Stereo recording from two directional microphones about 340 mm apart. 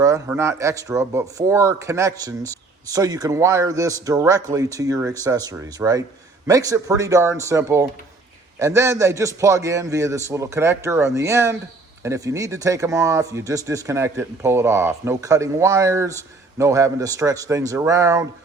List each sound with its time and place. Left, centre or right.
0.0 s speech: centre